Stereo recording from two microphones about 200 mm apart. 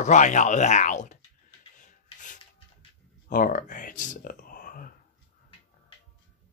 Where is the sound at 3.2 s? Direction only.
45° left (ahead or behind).